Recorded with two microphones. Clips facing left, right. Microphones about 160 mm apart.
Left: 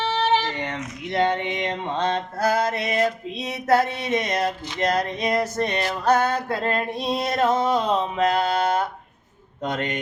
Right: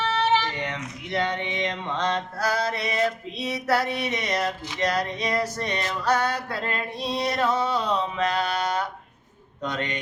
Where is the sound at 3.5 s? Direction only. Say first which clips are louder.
Left 4 dB; 50° left (ahead or behind).